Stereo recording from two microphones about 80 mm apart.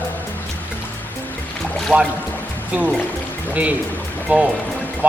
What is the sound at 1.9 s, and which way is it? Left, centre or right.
Speech, centre.